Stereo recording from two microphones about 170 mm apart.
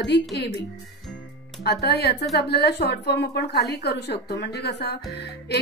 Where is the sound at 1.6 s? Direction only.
75° left (ahead or behind).